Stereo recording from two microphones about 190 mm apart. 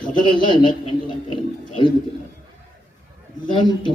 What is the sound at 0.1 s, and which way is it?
A man's voice, 25° left (ahead or behind).